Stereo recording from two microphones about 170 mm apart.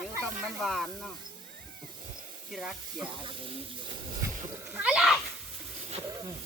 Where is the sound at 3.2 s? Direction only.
30° right (ahead or behind).